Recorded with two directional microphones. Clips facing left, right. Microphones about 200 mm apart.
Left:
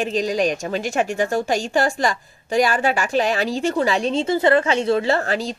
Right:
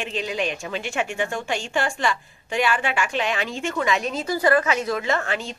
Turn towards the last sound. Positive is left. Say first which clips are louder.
# left 5 dB
turn(degrees=35)  # may be behind; listen again after turning